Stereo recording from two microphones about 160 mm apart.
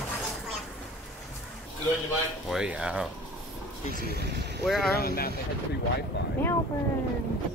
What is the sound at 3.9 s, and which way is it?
Speech, 80° right.